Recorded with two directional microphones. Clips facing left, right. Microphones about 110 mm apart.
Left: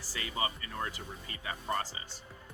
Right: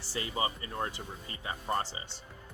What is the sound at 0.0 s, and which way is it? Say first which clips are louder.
Speech: right 2 dB; 30° right (ahead or behind).